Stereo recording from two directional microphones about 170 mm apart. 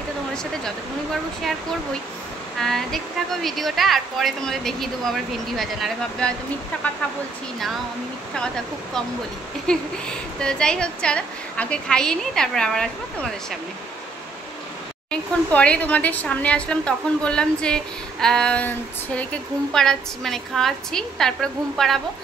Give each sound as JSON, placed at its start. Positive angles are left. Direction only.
{"t": 2.6, "sound": "a woman's voice", "side_deg": 0}
{"t": 8.4, "sound": "a woman's voice", "side_deg": 5}
{"t": 10.4, "sound": "a woman's voice", "side_deg": 5}
{"t": 15.0, "sound": "a woman's voice", "side_deg": 5}